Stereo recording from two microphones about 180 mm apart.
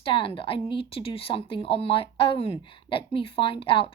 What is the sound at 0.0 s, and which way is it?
Speech, 30° left (ahead or behind).